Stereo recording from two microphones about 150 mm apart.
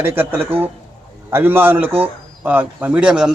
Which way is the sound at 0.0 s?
15° right (ahead or behind).